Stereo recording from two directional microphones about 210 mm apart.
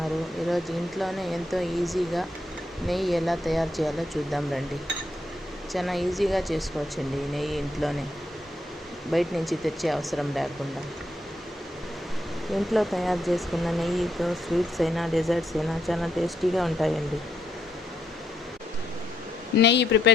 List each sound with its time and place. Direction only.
0.5 s speech: centre (ahead or behind)
5.7 s speech: centre (ahead or behind)
9.1 s speech: centre (ahead or behind)
12.7 s speech: centre (ahead or behind)
19.6 s speech: 55° left (ahead or behind)